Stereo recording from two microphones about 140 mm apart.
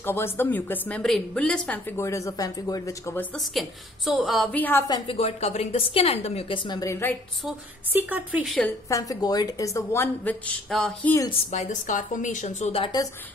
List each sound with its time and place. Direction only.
0.0 s a woman's voice: 15° left (ahead or behind)
1.9 s a woman's voice: 20° left (ahead or behind)
3.3 s a woman's voice: centre (ahead or behind)
4.5 s a woman's voice: 10° left (ahead or behind)
4.8 s a woman's voice: 35° left (ahead or behind)
6.8 s a woman's voice: 20° left (ahead or behind)
7.9 s speech: 10° right (ahead or behind)
8.8 s a woman's voice: 25° left (ahead or behind)
10.7 s a woman's voice: centre (ahead or behind)
11.5 s a woman's voice: 55° left (ahead or behind)
12.8 s a woman's voice: 30° left (ahead or behind)